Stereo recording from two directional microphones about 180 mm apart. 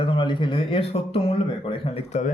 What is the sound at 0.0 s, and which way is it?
A man's voice, 25° left (ahead or behind).